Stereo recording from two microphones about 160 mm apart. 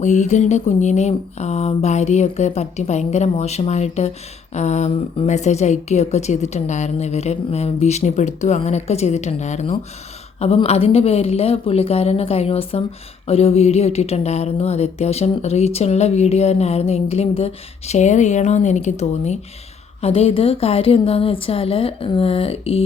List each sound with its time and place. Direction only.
0.0 s a woman's voice: 50° left (ahead or behind)